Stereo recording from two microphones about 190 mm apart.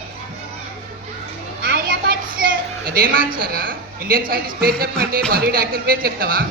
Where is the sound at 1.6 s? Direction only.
55° right (ahead or behind).